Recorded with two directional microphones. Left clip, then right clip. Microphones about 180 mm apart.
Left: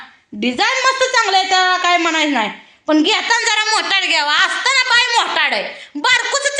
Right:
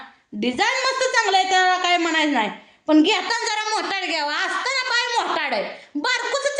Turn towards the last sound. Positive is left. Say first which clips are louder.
# left 7 dB
turn(degrees=0)  # may be behind; listen again after turning